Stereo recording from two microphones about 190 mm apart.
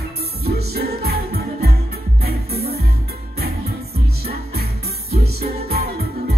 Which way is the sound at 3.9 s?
55° right (ahead or behind).